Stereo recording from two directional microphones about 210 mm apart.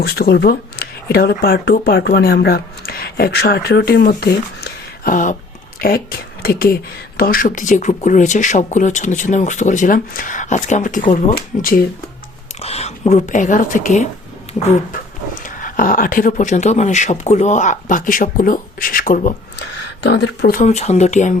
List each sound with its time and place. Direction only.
0.0 s speech: 50° left (ahead or behind)
12.5 s speech: 30° left (ahead or behind)
15.4 s speech: 40° left (ahead or behind)
20.0 s speech: 55° left (ahead or behind)
20.7 s speech: 30° left (ahead or behind)